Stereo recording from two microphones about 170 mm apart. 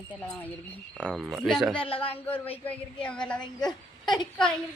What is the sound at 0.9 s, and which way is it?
Speech, 5° left (ahead or behind).